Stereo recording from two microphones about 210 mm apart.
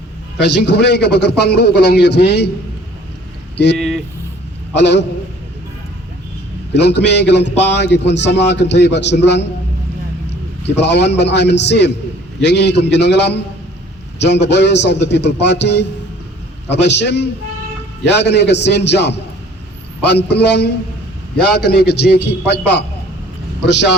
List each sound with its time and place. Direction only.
0.3 s a man's voice: 55° left (ahead or behind)
4.7 s speech: 55° left (ahead or behind)
6.7 s a man's voice: 55° left (ahead or behind)